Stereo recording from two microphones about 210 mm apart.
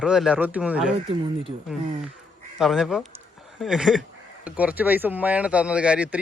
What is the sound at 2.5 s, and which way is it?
Speech, centre (ahead or behind).